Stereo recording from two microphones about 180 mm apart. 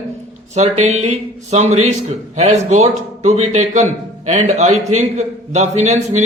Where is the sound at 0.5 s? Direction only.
40° right (ahead or behind).